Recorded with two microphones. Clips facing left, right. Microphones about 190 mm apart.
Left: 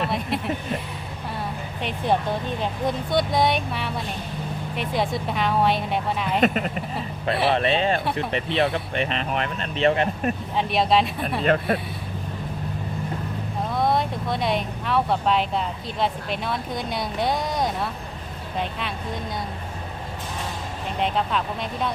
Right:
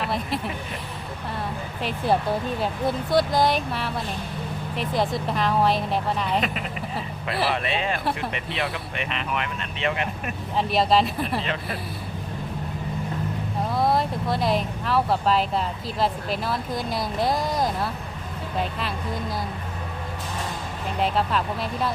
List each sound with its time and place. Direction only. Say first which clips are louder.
0.0 s a sound: left 2 dB; centre (ahead or behind)
2.6 s speech: even; 5° right (ahead or behind)
6.4 s speech: left 7 dB; 45° left (ahead or behind)
7.5 s speech: left 5 dB; 30° left (ahead or behind)
10.6 s speech: right 1 dB; centre (ahead or behind)
11.4 s speech: left 9 dB; 50° left (ahead or behind)
13.7 s speech: even; centre (ahead or behind)
21.0 s speech: right 1 dB; 5° right (ahead or behind)